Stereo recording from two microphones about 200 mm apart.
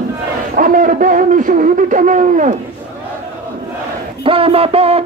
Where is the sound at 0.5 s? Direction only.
45° right (ahead or behind).